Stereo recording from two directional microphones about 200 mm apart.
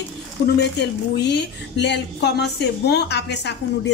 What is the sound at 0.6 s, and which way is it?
Speech, 60° left (ahead or behind).